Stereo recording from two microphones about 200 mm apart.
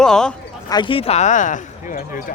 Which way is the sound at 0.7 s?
25° left (ahead or behind).